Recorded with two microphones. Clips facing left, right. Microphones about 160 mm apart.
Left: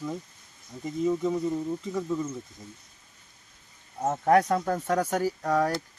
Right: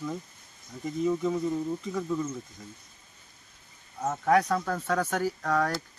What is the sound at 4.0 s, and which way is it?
Speech, 25° left (ahead or behind).